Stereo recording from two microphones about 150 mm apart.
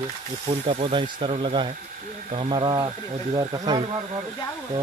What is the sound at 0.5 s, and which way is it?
Speech, 40° right (ahead or behind).